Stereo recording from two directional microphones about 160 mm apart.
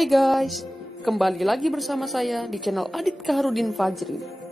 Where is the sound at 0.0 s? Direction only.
Centre (ahead or behind).